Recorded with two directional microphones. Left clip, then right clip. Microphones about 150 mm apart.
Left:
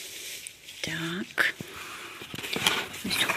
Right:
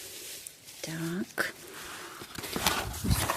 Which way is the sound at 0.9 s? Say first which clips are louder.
Left 5 dB; 20° right (ahead or behind).